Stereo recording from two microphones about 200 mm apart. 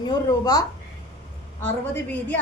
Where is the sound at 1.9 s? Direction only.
10° left (ahead or behind).